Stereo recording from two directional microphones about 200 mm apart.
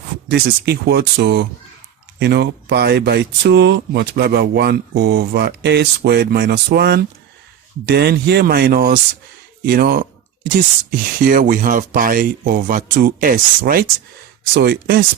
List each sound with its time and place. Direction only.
0.3 s speech: 55° right (ahead or behind)